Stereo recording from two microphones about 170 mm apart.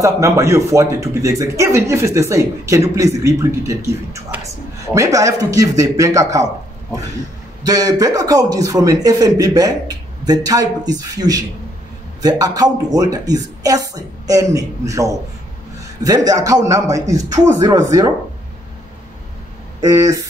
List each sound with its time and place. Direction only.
0.0 s speech: 15° right (ahead or behind)
7.6 s speech: 20° right (ahead or behind)
19.8 s speech: 20° right (ahead or behind)